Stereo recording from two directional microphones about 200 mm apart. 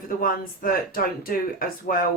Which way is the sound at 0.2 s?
45° left (ahead or behind).